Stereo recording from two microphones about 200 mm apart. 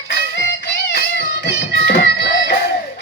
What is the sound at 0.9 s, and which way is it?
Music, 55° left (ahead or behind).